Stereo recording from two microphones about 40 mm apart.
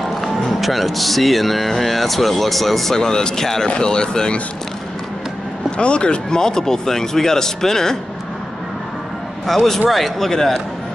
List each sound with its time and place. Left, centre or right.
0.5 s speech: centre; by 4.4 s left
5.8 s speech: left
9.5 s speech: centre